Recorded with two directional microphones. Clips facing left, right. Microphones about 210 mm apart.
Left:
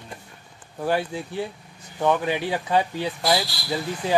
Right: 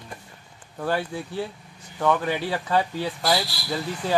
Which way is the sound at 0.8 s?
15° left (ahead or behind).